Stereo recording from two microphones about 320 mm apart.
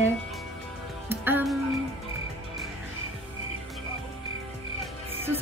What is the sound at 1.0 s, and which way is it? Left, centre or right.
Music, centre.